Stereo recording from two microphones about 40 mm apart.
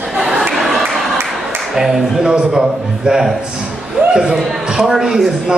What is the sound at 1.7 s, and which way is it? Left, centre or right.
Speech, centre.